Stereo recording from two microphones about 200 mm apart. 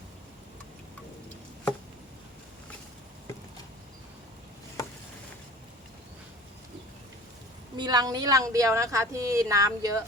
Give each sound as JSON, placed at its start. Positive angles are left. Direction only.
{"t": 7.8, "sound": "a woman's voice", "side_deg": -20}